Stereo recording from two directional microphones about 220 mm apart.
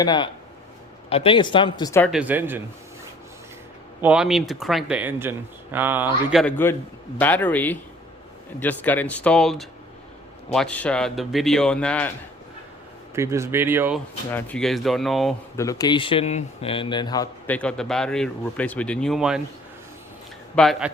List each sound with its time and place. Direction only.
0.0 s speech: 20° left (ahead or behind)
2.0 s speech: 5° right (ahead or behind)
4.0 s speech: 5° right (ahead or behind)
6.4 s a man's voice: 10° left (ahead or behind)
13.1 s speech: 10° right (ahead or behind)
14.3 s speech: 10° left (ahead or behind)
15.5 s a man's voice: 15° left (ahead or behind); by 19.4 s centre (ahead or behind)
20.6 s speech: centre (ahead or behind)